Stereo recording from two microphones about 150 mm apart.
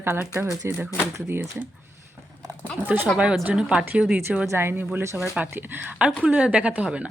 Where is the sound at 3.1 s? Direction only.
10° right (ahead or behind).